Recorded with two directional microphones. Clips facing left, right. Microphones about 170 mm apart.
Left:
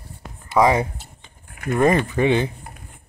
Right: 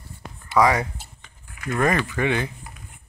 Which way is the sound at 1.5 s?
55° left (ahead or behind).